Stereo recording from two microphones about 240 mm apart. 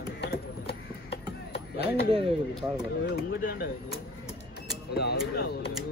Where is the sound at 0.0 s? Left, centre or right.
Left.